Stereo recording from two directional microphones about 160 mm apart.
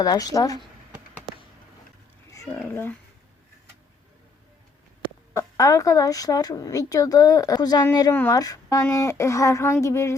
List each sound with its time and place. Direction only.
0.0 s speech: 25° left (ahead or behind)
2.3 s speech: 15° left (ahead or behind)
5.0 s speech: 20° left (ahead or behind)
8.1 s speech: 10° left (ahead or behind)
8.4 s speech: 25° left (ahead or behind)